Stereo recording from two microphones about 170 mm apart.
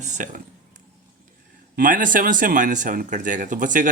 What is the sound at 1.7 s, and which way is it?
Speech, 50° right (ahead or behind).